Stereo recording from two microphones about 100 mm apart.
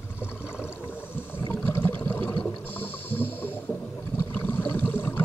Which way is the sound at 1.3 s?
20° left (ahead or behind).